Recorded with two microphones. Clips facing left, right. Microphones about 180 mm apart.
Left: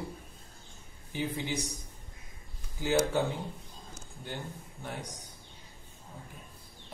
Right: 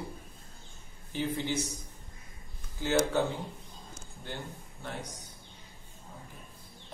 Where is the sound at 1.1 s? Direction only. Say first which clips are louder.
Right 2 dB; 15° left (ahead or behind).